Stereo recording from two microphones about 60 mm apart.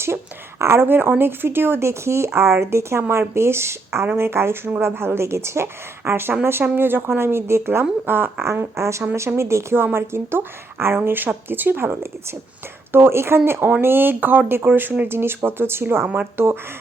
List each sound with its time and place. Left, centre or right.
0.6 s a woman's voice: right
8.4 s a woman's voice: right